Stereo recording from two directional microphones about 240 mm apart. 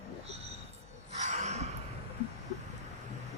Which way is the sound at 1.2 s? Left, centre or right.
Right.